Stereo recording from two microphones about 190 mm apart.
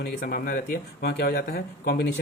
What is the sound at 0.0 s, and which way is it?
Speech, 50° left (ahead or behind).